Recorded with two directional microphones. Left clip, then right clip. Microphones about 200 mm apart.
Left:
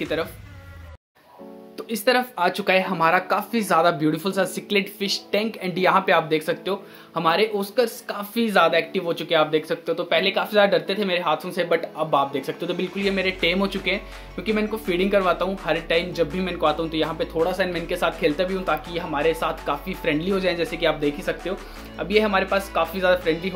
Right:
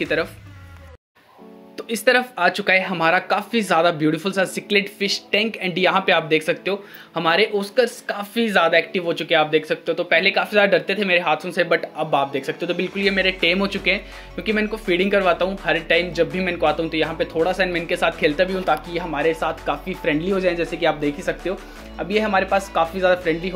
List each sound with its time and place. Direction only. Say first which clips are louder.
0.0 s speech: right 4 dB; 15° right (ahead or behind)
1.8 s speech: right 3 dB; 10° right (ahead or behind)